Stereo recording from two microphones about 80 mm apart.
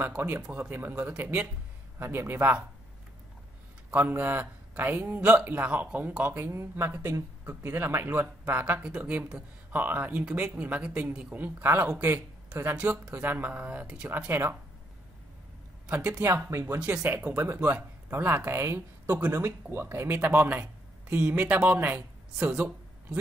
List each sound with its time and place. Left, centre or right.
0.0 s speech: right
3.9 s speech: right
8.8 s speech: centre
9.7 s speech: right
14.1 s speech: right
15.9 s speech: centre
16.3 s speech: right
16.8 s speech: centre